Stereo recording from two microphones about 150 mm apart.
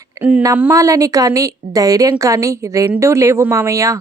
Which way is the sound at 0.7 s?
20° right (ahead or behind).